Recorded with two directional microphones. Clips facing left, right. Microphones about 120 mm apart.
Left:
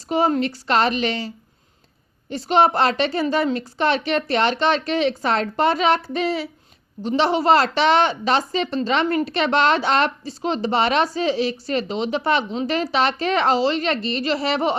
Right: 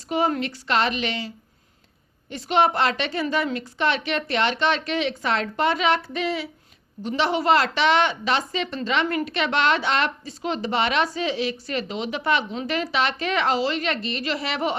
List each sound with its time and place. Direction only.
0.1 s speech: 35° left (ahead or behind)
2.3 s speech: 35° left (ahead or behind)